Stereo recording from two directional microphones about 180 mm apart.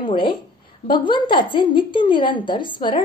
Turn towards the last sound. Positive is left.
turn(degrees=25)  # may be behind; listen again after turning